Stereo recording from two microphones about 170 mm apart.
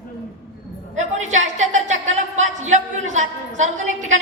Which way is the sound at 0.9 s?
45° right (ahead or behind).